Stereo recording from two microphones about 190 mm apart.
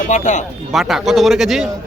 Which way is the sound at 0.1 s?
40° left (ahead or behind).